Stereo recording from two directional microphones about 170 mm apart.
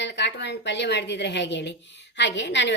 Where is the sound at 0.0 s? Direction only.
90° left.